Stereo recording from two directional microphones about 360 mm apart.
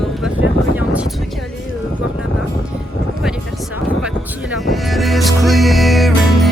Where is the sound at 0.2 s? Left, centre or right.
Centre.